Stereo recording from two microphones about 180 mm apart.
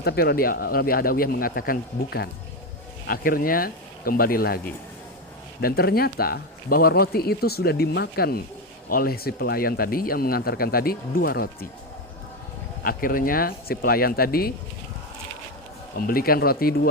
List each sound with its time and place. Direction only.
0.0 s speech: 60° left (ahead or behind)
12.8 s speech: 50° left (ahead or behind)
16.0 s speech: 55° left (ahead or behind)